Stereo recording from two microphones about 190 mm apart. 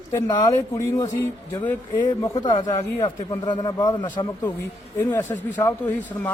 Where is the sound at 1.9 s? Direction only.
20° left (ahead or behind).